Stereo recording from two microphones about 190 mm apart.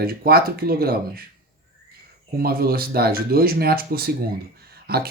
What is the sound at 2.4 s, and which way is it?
Speech, 50° right (ahead or behind).